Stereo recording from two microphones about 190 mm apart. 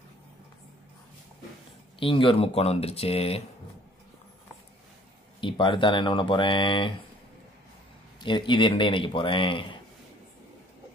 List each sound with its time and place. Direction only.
2.0 s speech: 25° left (ahead or behind)
5.4 s speech: 25° left (ahead or behind)
8.2 s speech: 25° left (ahead or behind)